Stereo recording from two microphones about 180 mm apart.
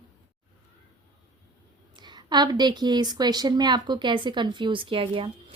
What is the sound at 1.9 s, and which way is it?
A woman's voice, 25° right (ahead or behind).